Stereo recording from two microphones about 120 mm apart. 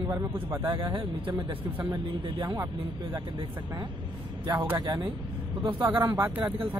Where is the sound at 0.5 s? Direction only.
35° right (ahead or behind).